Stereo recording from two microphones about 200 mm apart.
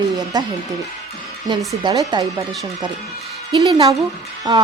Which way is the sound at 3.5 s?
20° right (ahead or behind).